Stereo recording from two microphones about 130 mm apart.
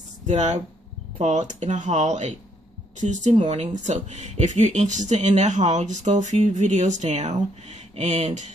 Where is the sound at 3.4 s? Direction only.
60° right (ahead or behind).